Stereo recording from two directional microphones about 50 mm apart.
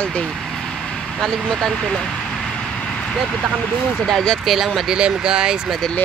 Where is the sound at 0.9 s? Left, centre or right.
Centre.